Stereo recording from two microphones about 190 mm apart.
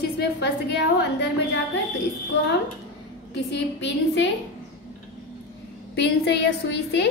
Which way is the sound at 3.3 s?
65° left (ahead or behind).